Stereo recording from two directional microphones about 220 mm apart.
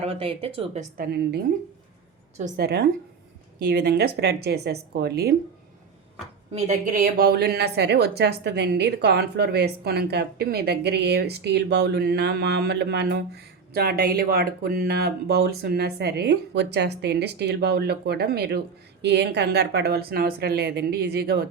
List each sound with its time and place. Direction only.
0.0 s speech: 25° right (ahead or behind)
0.9 s a woman's voice: 45° right (ahead or behind)
2.4 s a woman's voice: 45° right (ahead or behind)
6.5 s a woman's voice: 35° right (ahead or behind)